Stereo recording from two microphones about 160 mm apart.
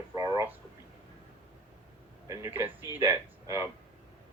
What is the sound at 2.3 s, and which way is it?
Speech, 15° right (ahead or behind).